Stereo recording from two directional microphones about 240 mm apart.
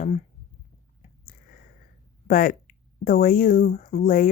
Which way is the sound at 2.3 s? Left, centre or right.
Left.